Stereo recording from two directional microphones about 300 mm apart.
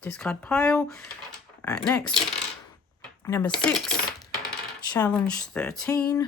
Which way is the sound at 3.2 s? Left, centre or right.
Centre.